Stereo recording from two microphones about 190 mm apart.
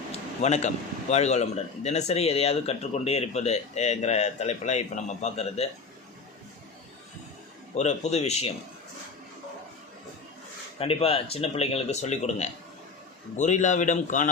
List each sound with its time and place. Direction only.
0.1 s a sound: 35° left (ahead or behind)
1.1 s speech: 35° left (ahead or behind)
7.8 s speech: 35° left (ahead or behind)
10.8 s speech: 30° left (ahead or behind)